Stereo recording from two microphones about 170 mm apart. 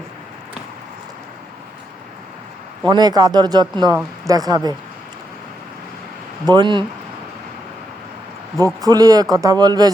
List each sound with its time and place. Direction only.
2.8 s a man's voice: 25° right (ahead or behind)
6.4 s a man's voice: 25° right (ahead or behind)
8.8 s a man's voice: 20° right (ahead or behind)